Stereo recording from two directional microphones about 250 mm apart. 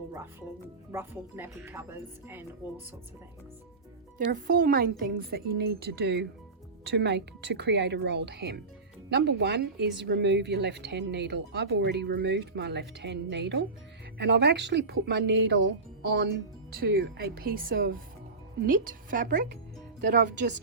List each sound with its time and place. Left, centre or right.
0.1 s speech: centre
4.3 s speech: right
20.0 s speech: right